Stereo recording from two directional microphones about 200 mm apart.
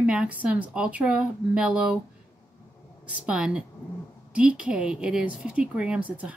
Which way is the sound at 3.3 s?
5° right (ahead or behind).